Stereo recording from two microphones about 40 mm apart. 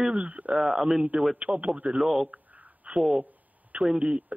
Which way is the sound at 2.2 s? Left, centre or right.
Right.